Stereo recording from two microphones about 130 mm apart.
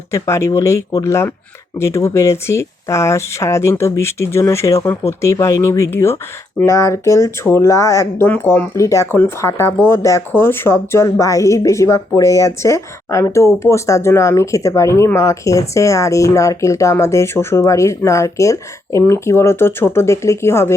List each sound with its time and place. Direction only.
0.1 s speech: 20° left (ahead or behind)